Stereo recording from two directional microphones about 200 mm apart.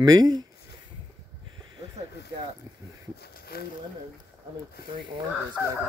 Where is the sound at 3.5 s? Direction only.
50° left (ahead or behind).